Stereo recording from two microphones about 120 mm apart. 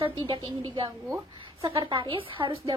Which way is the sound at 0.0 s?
45° right (ahead or behind).